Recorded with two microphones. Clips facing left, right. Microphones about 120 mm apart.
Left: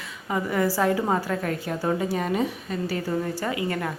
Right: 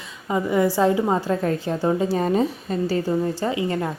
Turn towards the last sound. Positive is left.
turn(degrees=-25)  # may be behind; listen again after turning